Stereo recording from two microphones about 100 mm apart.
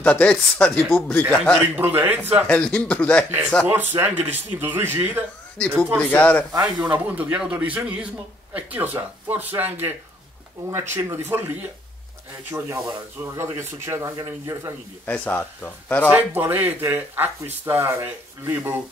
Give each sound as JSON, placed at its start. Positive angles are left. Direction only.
{"t": 0.0, "sound": "a man's voice", "side_deg": 10}
{"t": 1.6, "sound": "speech", "side_deg": -20}
{"t": 2.4, "sound": "a man's voice", "side_deg": 10}
{"t": 3.6, "sound": "speech", "side_deg": -20}
{"t": 5.9, "sound": "a man's voice", "side_deg": 15}
{"t": 6.6, "sound": "speech", "side_deg": -15}
{"t": 15.0, "sound": "a man's voice", "side_deg": 15}
{"t": 16.1, "sound": "speech", "side_deg": -20}